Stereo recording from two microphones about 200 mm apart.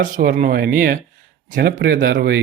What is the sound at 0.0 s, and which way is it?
Speech, 45° right (ahead or behind).